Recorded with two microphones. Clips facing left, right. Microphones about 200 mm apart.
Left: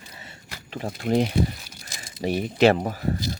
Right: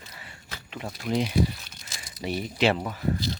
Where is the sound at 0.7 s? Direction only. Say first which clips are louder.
Left 5 dB; 35° left (ahead or behind).